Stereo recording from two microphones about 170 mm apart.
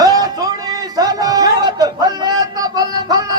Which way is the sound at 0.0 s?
20° right (ahead or behind).